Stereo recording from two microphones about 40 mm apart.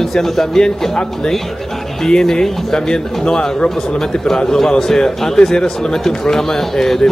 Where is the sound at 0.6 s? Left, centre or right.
Centre.